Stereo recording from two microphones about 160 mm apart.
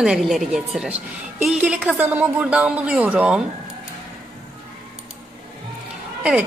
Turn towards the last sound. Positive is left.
turn(degrees=-10)  # may be behind; listen again after turning